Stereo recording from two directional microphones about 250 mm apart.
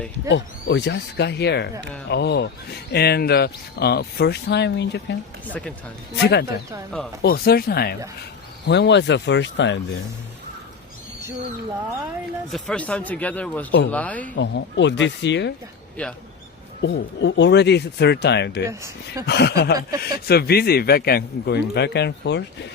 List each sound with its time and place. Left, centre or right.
0.3 s speech: left
6.1 s speech: left
12.5 s speech: centre
14.3 s speech: left
16.0 s speech: centre
16.8 s speech: left
18.6 s speech: centre
19.2 s speech: left